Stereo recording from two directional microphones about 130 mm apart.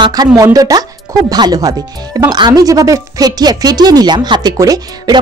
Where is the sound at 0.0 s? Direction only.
30° right (ahead or behind).